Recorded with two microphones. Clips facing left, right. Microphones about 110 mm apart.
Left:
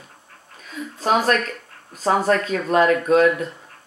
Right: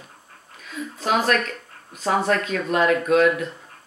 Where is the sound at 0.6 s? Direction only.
40° left (ahead or behind).